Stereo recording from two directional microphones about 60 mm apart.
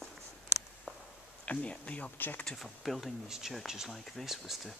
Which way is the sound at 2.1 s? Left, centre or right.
Left.